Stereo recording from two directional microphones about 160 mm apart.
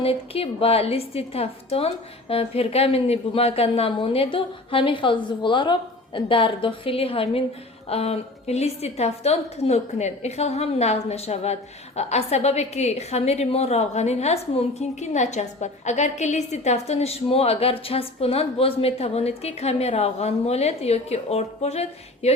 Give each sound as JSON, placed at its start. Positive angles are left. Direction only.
{"t": 0.0, "sound": "a woman's voice", "side_deg": 35}